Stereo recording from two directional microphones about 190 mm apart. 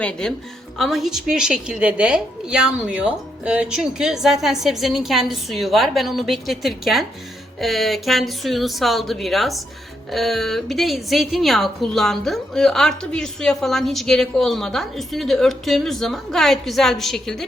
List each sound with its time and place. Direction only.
0.0 s a woman's voice: 5° left (ahead or behind)